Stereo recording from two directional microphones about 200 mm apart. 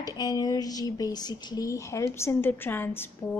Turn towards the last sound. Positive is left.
turn(degrees=10)  # may be behind; listen again after turning